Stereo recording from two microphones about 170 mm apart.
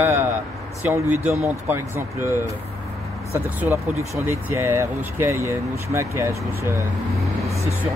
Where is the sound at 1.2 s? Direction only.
15° right (ahead or behind).